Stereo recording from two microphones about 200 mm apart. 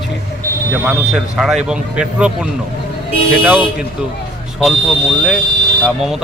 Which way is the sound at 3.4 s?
5° right (ahead or behind).